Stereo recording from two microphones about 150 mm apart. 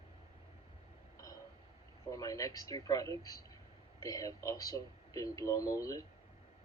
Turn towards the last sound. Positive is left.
turn(degrees=25)  # may be behind; listen again after turning